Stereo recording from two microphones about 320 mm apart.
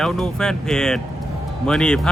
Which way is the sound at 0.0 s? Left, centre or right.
Centre.